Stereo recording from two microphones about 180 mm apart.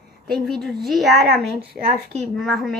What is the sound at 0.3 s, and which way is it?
A woman's voice, centre (ahead or behind).